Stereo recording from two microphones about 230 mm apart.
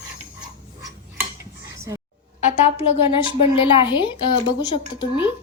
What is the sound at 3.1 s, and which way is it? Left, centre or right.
Speech, left.